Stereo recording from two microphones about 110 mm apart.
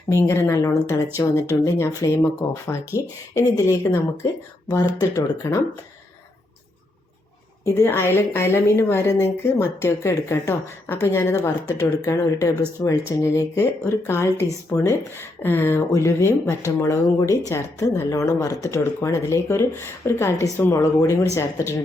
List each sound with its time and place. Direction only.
0.1 s a woman's voice: 25° left (ahead or behind)
7.6 s a woman's voice: 25° left (ahead or behind)